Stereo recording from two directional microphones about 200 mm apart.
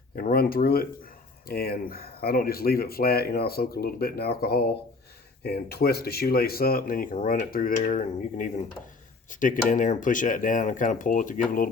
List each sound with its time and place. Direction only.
0.2 s speech: 50° left (ahead or behind)